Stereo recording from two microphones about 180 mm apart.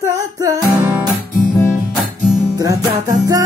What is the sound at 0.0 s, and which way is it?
Music, 20° right (ahead or behind).